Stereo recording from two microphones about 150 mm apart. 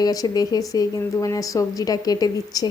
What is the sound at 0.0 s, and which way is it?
A woman's voice, 25° left (ahead or behind).